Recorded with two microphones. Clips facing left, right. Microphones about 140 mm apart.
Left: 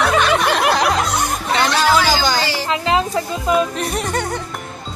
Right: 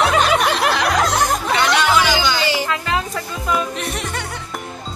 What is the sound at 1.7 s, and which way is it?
Speech, 35° left (ahead or behind).